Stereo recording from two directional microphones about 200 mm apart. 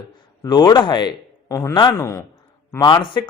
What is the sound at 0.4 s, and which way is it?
Speech, 20° left (ahead or behind).